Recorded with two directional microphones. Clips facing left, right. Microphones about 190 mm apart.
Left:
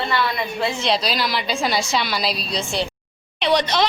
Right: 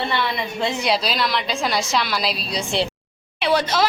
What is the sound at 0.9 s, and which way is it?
A woman's voice, centre (ahead or behind).